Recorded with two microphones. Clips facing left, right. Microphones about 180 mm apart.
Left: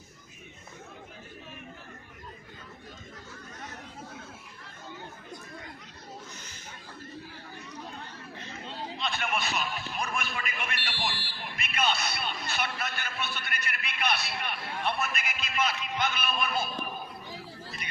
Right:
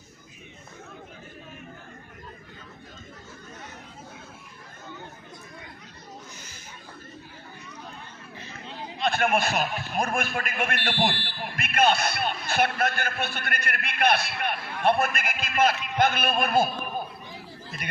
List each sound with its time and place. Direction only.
9.0 s a man's voice: 55° right (ahead or behind)